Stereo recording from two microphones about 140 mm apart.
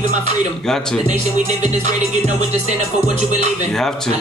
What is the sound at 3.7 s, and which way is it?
Speech, 5° left (ahead or behind).